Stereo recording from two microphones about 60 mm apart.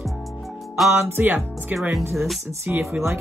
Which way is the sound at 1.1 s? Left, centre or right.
Right.